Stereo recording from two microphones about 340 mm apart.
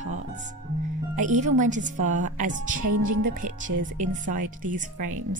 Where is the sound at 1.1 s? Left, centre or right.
Right.